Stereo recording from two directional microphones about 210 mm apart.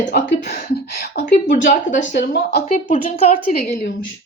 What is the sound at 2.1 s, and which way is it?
Speech, 50° left (ahead or behind).